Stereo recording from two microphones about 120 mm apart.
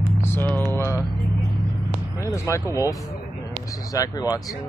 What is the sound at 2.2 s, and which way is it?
Speech, 25° left (ahead or behind).